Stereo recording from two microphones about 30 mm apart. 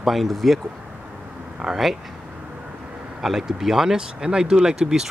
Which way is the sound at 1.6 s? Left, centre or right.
Right.